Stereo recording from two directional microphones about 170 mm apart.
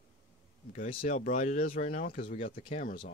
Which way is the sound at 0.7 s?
45° left (ahead or behind).